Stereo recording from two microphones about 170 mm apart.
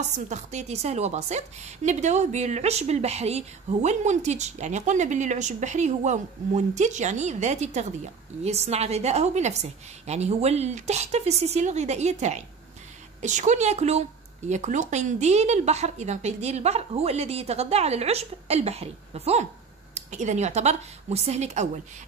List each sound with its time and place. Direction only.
0.3 s a woman's voice: 45° right (ahead or behind)